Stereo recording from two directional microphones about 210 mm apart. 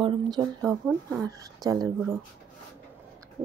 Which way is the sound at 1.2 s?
15° right (ahead or behind).